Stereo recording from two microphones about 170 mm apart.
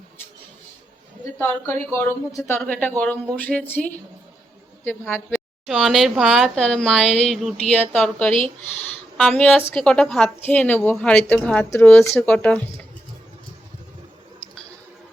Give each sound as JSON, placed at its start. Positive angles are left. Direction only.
{"t": 1.4, "sound": "speech", "side_deg": 10}
{"t": 5.3, "sound": "speech", "side_deg": 0}